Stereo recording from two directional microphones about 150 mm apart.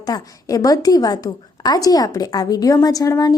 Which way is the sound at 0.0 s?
25° left (ahead or behind).